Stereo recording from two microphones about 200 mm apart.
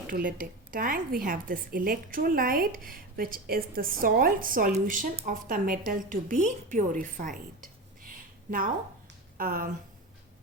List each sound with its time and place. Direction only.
0.1 s a woman's voice: 45° right (ahead or behind)